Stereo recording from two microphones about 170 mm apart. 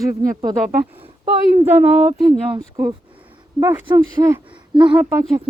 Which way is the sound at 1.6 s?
10° right (ahead or behind).